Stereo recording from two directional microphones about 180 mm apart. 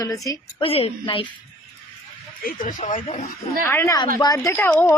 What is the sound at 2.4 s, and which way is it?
Speech, 50° left (ahead or behind).